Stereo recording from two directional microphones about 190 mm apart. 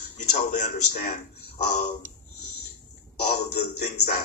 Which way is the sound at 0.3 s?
40° left (ahead or behind).